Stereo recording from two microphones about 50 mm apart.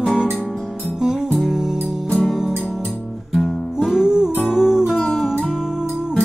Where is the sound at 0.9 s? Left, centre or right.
Centre.